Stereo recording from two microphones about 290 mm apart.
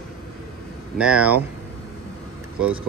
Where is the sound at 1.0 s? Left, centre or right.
Centre.